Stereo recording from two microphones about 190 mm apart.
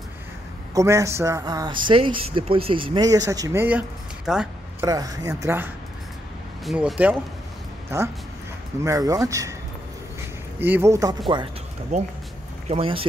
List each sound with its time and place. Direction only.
0.7 s speech: 15° right (ahead or behind)
4.3 s a sound: 5° right (ahead or behind)
4.8 s speech: 20° right (ahead or behind)
6.6 s speech: centre (ahead or behind); by 9.6 s 15° right (ahead or behind)
10.6 s speech: 10° right (ahead or behind)
11.9 s speech: 35° right (ahead or behind)